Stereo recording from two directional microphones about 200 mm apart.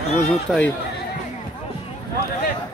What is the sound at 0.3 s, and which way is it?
Speech, centre (ahead or behind).